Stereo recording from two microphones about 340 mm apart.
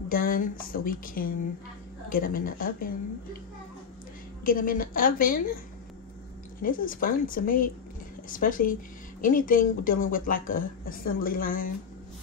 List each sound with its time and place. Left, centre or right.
0.1 s speech: left
4.5 s speech: left
6.6 s speech: left